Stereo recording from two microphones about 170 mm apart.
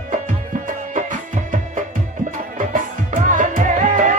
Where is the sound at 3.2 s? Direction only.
50° right (ahead or behind).